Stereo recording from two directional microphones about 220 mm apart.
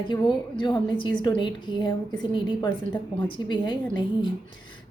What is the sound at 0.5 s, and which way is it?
A woman's voice, 20° left (ahead or behind).